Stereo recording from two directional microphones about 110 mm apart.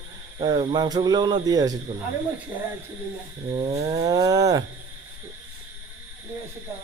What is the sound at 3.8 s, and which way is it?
Speech, 35° right (ahead or behind).